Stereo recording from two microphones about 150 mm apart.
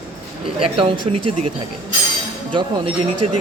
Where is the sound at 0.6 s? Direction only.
35° right (ahead or behind).